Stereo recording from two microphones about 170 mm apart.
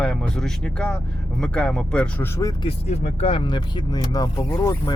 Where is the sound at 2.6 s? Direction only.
35° left (ahead or behind).